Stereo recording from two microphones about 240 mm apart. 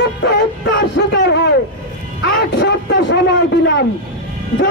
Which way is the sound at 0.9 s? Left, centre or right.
Left.